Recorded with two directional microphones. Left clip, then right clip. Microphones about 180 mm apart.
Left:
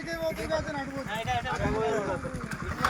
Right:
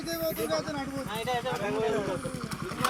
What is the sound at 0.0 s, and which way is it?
Speech, 55° right (ahead or behind).